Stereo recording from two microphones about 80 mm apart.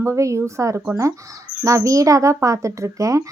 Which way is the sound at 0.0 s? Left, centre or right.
Right.